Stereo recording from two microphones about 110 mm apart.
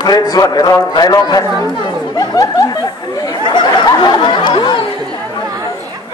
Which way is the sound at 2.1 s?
35° left (ahead or behind).